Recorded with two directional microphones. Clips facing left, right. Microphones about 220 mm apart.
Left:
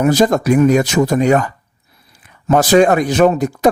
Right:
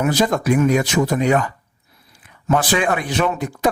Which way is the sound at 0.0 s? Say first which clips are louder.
Left 5 dB; 45° left (ahead or behind).